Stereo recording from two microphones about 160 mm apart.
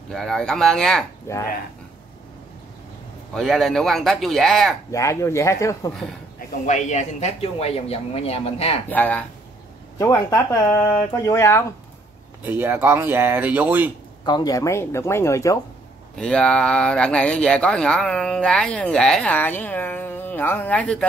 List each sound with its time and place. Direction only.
0.1 s speech: centre (ahead or behind)
1.3 s speech: 15° left (ahead or behind)
3.3 s speech: centre (ahead or behind)
4.9 s speech: 20° left (ahead or behind)
6.6 s speech: 45° left (ahead or behind)
8.8 s speech: 10° left (ahead or behind)
12.4 s speech: 15° right (ahead or behind)
14.2 s speech: 25° left (ahead or behind)
16.2 s speech: 5° left (ahead or behind)